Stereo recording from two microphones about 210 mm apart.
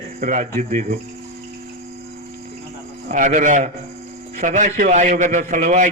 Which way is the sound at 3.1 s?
35° right (ahead or behind).